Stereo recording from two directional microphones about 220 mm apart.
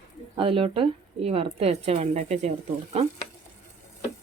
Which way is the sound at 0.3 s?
25° right (ahead or behind).